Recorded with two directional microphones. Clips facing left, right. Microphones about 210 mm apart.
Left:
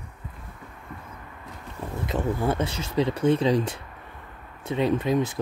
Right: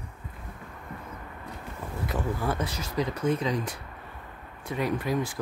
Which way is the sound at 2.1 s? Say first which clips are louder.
Left 4 dB; 25° left (ahead or behind).